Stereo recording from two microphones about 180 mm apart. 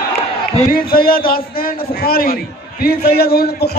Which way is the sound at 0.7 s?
55° left (ahead or behind).